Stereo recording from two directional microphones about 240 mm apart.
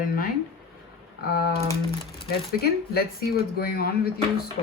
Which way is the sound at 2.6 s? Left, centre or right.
Left.